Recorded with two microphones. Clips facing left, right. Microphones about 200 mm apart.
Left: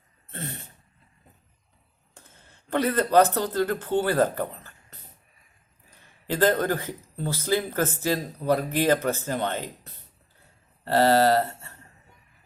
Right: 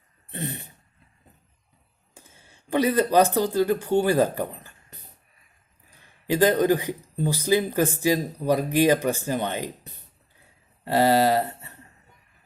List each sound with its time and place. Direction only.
0.3 s a sound: 15° right (ahead or behind)
2.1 s speech: 10° right (ahead or behind)
6.2 s speech: 15° right (ahead or behind)